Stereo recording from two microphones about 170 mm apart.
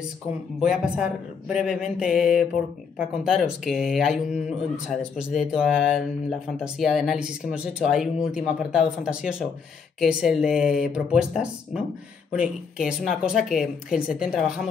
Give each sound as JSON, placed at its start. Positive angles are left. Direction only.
{"t": 0.6, "sound": "speech", "side_deg": -5}